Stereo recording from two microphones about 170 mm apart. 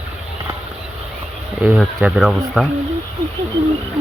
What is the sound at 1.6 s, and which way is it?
Speech, 5° right (ahead or behind).